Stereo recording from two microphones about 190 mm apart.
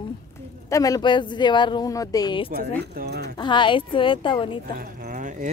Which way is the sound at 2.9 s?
60° right (ahead or behind).